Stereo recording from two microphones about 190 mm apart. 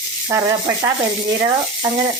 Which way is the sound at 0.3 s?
15° right (ahead or behind).